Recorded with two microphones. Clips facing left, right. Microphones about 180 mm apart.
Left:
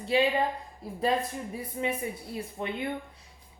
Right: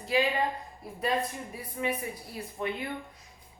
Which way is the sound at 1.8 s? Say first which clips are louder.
Even; 25° left (ahead or behind).